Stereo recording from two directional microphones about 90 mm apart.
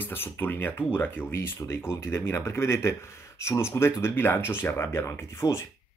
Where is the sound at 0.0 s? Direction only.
25° left (ahead or behind).